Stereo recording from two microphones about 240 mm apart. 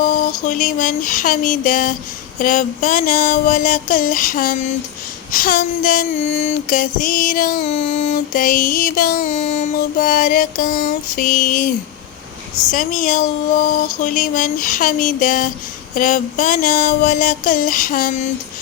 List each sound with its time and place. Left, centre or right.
0.0 s a sound: left
0.4 s music: left
12.7 s music: left